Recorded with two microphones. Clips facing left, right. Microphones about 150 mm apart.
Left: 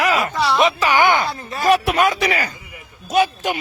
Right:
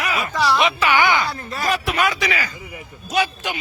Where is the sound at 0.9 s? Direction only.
50° left (ahead or behind).